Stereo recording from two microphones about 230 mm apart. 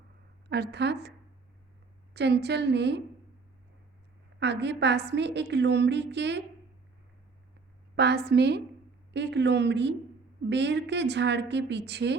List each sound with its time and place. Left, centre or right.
0.4 s a woman's voice: right
2.1 s a woman's voice: right
4.4 s a woman's voice: right
7.9 s a woman's voice: right